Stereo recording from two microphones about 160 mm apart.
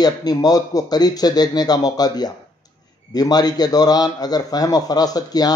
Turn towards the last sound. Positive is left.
turn(degrees=25)  # may be behind; listen again after turning